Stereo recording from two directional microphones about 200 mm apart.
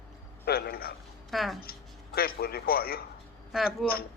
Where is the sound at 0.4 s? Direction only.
50° left (ahead or behind).